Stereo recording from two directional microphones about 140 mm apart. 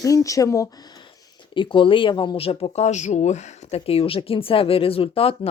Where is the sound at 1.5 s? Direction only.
35° left (ahead or behind).